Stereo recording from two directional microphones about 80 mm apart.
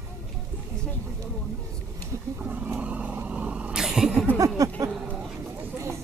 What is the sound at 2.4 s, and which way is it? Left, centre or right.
Speech, centre.